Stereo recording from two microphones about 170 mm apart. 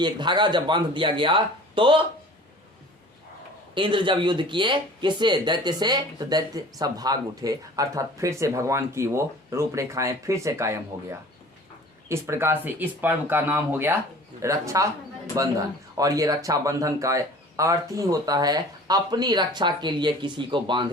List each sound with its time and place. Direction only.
0.0 s speech: 25° right (ahead or behind)
3.8 s speech: 30° right (ahead or behind)